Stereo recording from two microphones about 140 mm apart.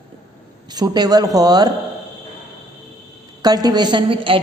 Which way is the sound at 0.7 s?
30° right (ahead or behind).